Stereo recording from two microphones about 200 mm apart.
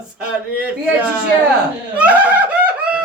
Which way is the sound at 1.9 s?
5° right (ahead or behind).